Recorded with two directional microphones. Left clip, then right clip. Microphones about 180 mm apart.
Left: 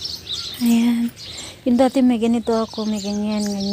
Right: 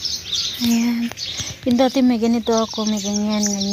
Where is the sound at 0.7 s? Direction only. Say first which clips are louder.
Left 1 dB; 20° left (ahead or behind); by 3.2 s centre (ahead or behind).